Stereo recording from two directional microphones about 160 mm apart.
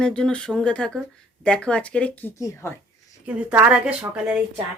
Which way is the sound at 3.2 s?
10° right (ahead or behind).